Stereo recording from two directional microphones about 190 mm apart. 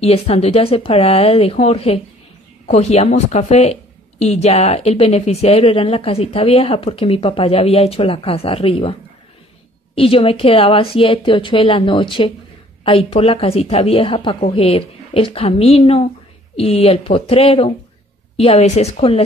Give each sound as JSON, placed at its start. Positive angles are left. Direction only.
{"t": 0.0, "sound": "speech", "side_deg": 30}
{"t": 9.9, "sound": "a woman's voice", "side_deg": 30}